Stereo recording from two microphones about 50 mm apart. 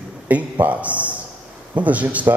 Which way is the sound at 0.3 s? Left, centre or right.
Right.